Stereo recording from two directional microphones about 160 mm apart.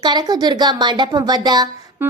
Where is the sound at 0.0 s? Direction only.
25° right (ahead or behind).